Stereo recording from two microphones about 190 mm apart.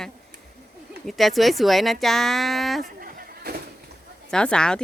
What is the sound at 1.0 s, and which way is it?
Speech, centre (ahead or behind).